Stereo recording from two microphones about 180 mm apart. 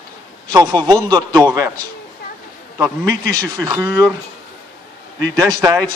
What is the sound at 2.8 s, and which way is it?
A man's voice, 15° right (ahead or behind).